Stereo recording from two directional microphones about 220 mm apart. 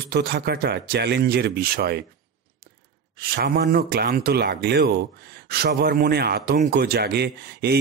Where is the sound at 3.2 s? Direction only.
45° right (ahead or behind).